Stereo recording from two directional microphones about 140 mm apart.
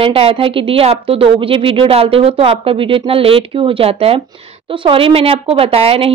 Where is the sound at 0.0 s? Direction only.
40° right (ahead or behind).